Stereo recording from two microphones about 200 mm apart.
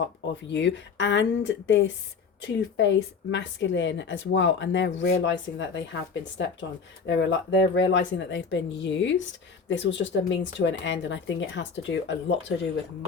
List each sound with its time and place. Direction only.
0.5 s speech: 65° left (ahead or behind)